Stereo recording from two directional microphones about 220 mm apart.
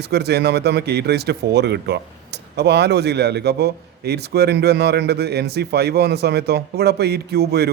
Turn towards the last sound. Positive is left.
turn(degrees=-45)  # may be behind; listen again after turning